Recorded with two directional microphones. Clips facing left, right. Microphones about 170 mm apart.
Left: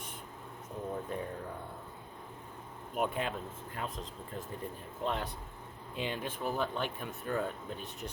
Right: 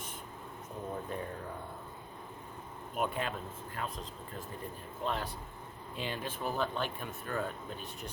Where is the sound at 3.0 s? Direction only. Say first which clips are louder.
Left 1 dB; 20° left (ahead or behind).